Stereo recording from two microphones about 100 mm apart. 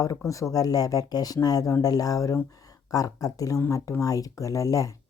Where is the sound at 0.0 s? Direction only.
35° left (ahead or behind).